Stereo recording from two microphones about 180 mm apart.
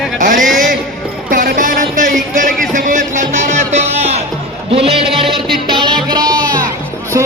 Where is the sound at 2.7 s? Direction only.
45° right (ahead or behind).